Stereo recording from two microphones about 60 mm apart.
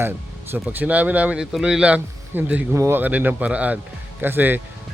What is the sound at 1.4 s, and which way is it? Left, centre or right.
Speech, centre.